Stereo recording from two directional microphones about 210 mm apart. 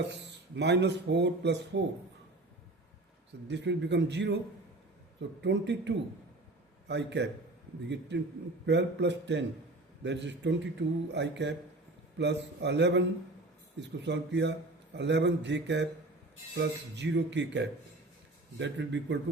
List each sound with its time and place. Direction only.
0.1 s speech: 55° right (ahead or behind)
3.5 s speech: 55° right (ahead or behind)
5.4 s speech: 55° right (ahead or behind)
8.6 s speech: 55° right (ahead or behind)